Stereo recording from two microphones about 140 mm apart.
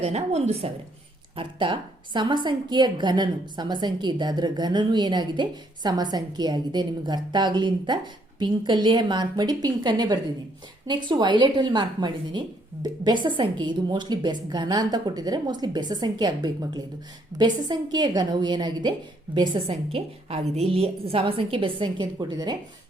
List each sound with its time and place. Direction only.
0.0 s speech: 50° right (ahead or behind)
1.4 s a woman's voice: 35° right (ahead or behind)